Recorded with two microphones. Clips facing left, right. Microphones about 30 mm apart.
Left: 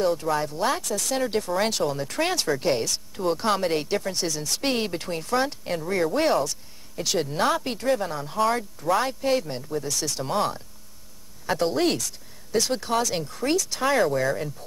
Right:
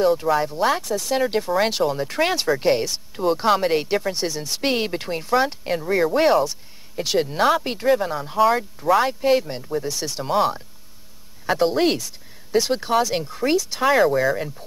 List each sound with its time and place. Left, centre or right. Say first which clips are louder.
0.0 s speech: right 5 dB; centre